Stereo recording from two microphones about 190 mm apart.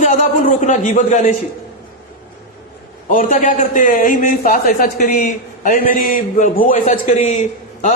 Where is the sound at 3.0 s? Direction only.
40° left (ahead or behind).